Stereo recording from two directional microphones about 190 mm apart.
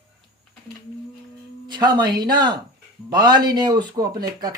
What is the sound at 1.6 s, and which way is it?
Speech, 20° right (ahead or behind).